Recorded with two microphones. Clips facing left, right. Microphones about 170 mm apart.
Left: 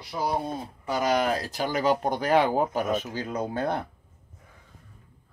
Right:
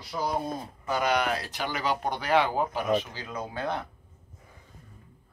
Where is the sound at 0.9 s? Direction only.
40° left (ahead or behind).